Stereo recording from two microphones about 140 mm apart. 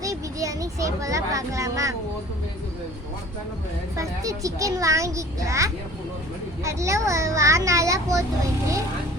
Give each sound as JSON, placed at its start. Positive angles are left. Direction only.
{"t": 0.0, "sound": "speech", "side_deg": -25}
{"t": 3.9, "sound": "speech", "side_deg": -25}